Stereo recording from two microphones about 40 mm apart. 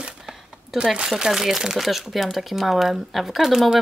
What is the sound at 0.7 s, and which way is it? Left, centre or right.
Speech, right.